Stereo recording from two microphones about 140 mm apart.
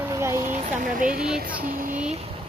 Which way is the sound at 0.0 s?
20° right (ahead or behind).